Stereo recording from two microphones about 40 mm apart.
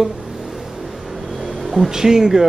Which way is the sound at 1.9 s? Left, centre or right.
Centre.